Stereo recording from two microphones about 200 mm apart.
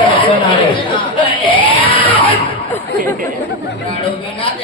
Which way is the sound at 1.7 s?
25° left (ahead or behind).